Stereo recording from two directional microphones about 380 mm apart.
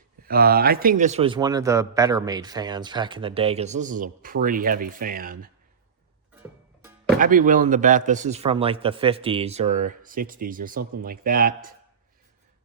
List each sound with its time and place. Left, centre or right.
0.2 s speech: right
7.2 s a man's voice: right